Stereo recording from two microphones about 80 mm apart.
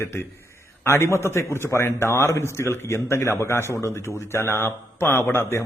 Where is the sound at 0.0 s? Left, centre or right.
Left.